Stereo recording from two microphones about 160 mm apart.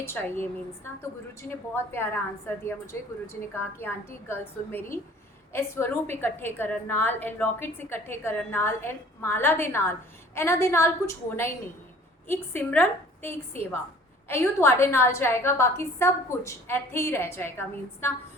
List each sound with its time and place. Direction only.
0.0 s a woman's voice: 15° left (ahead or behind)